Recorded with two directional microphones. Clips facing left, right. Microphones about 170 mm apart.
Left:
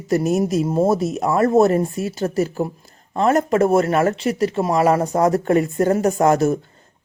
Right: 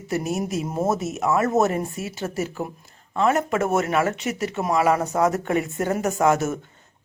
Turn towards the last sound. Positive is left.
turn(degrees=35)  # may be behind; listen again after turning